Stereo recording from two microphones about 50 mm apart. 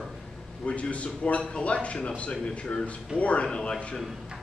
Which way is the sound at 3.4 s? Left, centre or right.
Centre.